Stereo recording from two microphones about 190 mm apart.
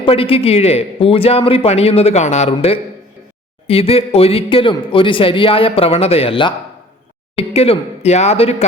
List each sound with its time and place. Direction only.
0.0 s a man's voice: 30° left (ahead or behind)